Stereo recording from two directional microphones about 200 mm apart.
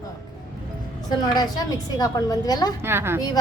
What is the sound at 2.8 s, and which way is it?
Speech, 10° right (ahead or behind).